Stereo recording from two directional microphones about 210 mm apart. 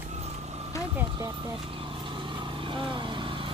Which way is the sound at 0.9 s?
15° right (ahead or behind).